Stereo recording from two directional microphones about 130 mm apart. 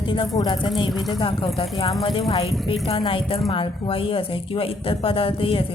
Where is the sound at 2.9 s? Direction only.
40° left (ahead or behind).